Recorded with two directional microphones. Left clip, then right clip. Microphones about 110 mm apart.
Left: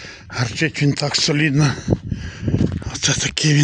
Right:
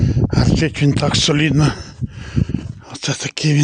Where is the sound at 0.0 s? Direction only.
15° right (ahead or behind).